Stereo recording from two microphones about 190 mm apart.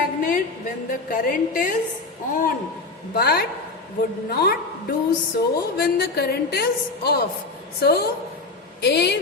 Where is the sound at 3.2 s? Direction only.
55° left (ahead or behind).